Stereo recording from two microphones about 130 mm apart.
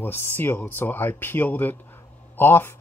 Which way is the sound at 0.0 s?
15° left (ahead or behind).